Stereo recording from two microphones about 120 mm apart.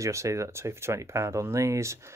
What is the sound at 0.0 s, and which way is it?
Speech, 25° right (ahead or behind).